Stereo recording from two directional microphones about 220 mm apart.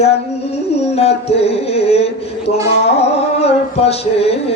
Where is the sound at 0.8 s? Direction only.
30° left (ahead or behind).